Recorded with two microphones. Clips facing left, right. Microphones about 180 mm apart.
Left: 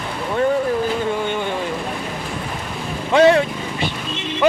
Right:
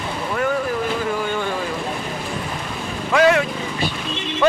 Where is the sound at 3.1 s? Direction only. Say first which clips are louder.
Left 3 dB; 30° left (ahead or behind).